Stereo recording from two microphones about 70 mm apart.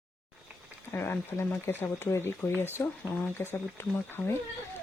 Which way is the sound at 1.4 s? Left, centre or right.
Left.